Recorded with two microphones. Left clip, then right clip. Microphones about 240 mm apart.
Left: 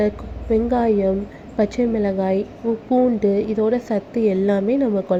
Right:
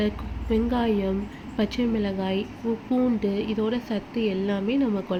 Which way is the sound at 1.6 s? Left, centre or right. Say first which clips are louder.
Left 7 dB; centre.